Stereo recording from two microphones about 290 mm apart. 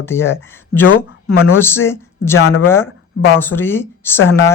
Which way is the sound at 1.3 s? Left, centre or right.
Left.